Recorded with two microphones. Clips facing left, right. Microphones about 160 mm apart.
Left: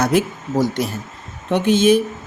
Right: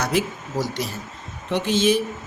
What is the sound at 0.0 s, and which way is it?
Speech, 50° left (ahead or behind).